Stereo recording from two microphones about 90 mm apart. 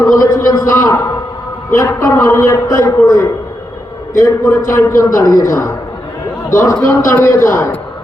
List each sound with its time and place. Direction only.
0.0 s a man's voice: 35° left (ahead or behind)